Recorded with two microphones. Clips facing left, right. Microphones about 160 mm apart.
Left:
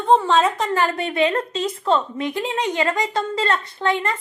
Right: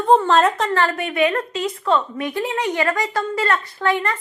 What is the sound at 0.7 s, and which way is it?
Speech, 15° left (ahead or behind).